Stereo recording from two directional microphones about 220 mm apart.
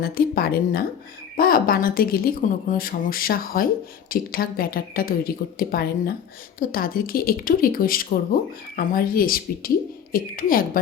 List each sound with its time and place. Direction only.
0.0 s a woman's voice: 40° left (ahead or behind)